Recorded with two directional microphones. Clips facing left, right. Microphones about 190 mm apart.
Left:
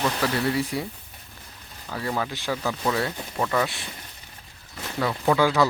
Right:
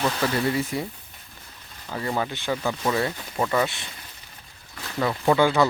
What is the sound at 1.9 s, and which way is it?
Speech, 5° right (ahead or behind).